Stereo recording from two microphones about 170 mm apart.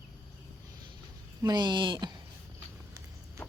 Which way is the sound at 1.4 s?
25° right (ahead or behind).